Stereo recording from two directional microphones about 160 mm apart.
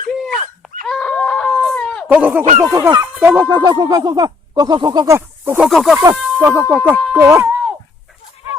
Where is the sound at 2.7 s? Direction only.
20° right (ahead or behind).